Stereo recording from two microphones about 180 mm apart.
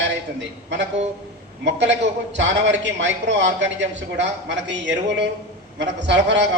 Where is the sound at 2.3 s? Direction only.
85° right.